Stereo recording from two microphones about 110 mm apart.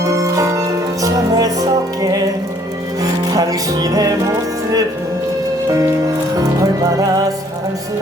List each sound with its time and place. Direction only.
0.0 s music: 30° right (ahead or behind)
6.3 s music: 30° right (ahead or behind)